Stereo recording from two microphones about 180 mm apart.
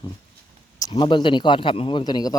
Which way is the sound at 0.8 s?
25° left (ahead or behind).